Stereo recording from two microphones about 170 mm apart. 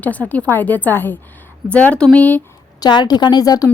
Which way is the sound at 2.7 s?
25° left (ahead or behind).